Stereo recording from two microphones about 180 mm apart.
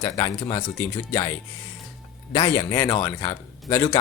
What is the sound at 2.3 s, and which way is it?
A man's voice, 15° left (ahead or behind).